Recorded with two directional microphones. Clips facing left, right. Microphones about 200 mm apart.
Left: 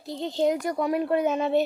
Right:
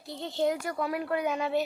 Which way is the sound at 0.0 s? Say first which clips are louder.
Left 4 dB; 20° left (ahead or behind).